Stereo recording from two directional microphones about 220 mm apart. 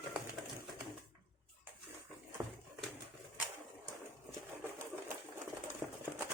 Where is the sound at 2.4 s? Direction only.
10° right (ahead or behind).